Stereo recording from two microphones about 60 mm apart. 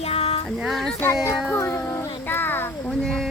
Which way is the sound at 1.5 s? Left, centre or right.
Left.